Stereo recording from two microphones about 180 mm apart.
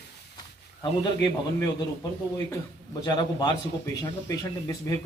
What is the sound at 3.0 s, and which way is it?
A man's voice, 20° left (ahead or behind).